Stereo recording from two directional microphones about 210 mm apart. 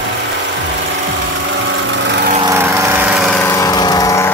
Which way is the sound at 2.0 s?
55° right (ahead or behind).